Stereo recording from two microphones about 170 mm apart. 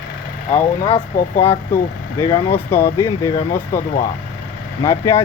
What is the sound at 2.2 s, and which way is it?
Speech, 15° left (ahead or behind).